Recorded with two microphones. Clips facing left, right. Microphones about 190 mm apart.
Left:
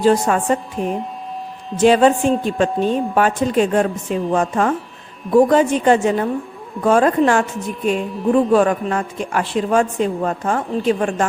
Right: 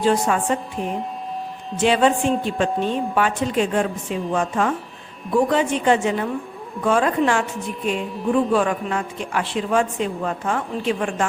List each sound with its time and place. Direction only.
0.0 s a woman's voice: 45° left (ahead or behind)
1.8 s a woman's voice: 40° left (ahead or behind)